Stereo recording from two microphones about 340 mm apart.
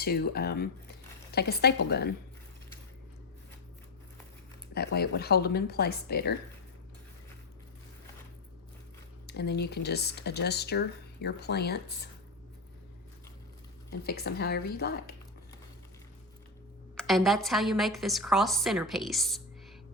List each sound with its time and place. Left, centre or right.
0.0 s speech: left
4.7 s speech: left
9.2 s speech: left
14.0 s speech: left
17.0 s a woman's voice: centre